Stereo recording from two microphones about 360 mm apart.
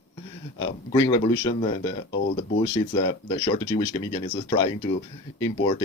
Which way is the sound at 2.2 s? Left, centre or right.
Left.